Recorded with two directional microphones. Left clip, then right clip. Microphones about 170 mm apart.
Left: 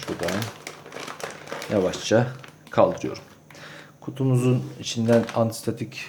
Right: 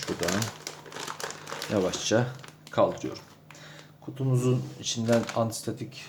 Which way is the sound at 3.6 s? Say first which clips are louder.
Left 6 dB; 25° left (ahead or behind).